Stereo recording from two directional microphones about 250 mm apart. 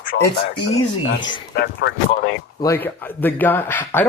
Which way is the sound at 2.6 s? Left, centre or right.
Centre.